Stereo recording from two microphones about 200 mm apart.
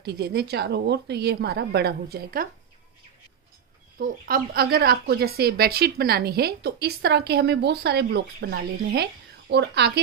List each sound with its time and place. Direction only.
0.0 s speech: 55° right (ahead or behind)
4.0 s speech: 50° right (ahead or behind)